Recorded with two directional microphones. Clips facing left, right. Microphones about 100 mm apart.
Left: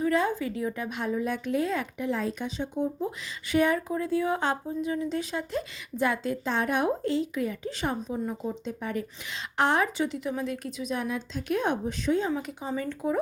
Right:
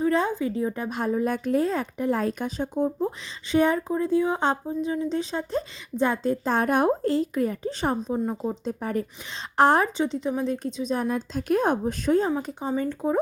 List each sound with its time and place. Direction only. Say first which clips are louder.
0.0 s speech: right 2 dB; 30° right (ahead or behind)
3.5 s speech: right 3 dB; 30° right (ahead or behind)
6.5 s speech: right 4 dB; 45° right (ahead or behind)
10.0 s speech: right 4 dB; 25° right (ahead or behind); by 12.3 s 45° right (ahead or behind)
12.4 s speech: right 5 dB; 35° right (ahead or behind)